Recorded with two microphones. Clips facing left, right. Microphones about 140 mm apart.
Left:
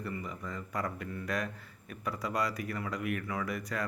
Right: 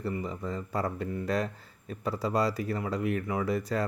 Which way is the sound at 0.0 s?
30° right (ahead or behind).